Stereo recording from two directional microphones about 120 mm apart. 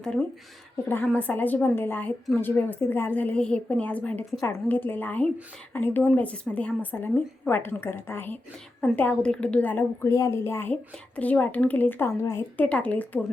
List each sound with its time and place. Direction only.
0.0 s a woman's voice: 5° left (ahead or behind)